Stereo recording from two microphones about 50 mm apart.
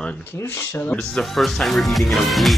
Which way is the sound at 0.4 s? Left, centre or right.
Left.